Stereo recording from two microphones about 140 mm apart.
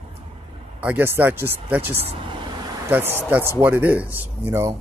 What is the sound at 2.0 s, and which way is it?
Speech, 40° right (ahead or behind).